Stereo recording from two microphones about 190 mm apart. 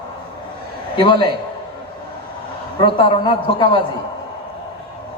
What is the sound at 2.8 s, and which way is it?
A man's voice, 25° left (ahead or behind).